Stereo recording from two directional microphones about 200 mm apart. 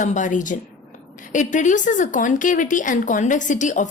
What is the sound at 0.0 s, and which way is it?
A woman's voice, 40° left (ahead or behind).